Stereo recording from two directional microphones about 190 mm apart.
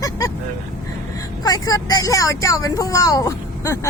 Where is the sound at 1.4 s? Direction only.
20° left (ahead or behind).